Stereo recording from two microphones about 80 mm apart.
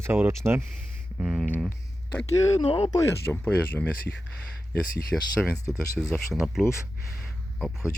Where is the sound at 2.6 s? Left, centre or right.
Left.